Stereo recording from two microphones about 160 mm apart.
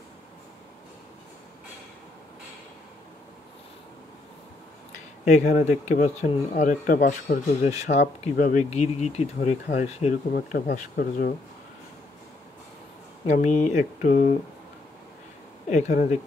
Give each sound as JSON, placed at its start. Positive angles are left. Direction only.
{"t": 5.2, "sound": "speech", "side_deg": 50}
{"t": 10.3, "sound": "speech", "side_deg": 60}
{"t": 13.3, "sound": "speech", "side_deg": 45}
{"t": 15.9, "sound": "speech", "side_deg": 50}